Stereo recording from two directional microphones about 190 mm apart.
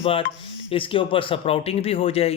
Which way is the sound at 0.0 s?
30° left (ahead or behind).